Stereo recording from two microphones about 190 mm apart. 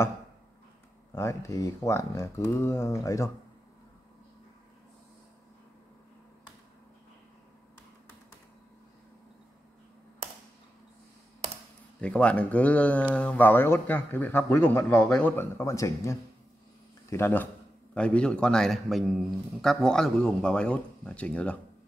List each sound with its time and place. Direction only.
1.1 s speech: 15° left (ahead or behind)
12.0 s a man's voice: 5° left (ahead or behind)